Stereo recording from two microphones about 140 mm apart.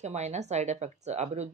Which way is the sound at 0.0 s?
55° right (ahead or behind).